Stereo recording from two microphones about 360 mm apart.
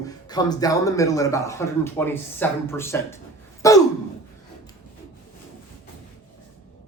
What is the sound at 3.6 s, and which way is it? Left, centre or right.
Gasp, centre.